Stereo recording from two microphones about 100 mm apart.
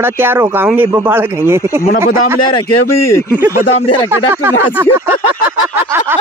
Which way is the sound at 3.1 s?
30° left (ahead or behind).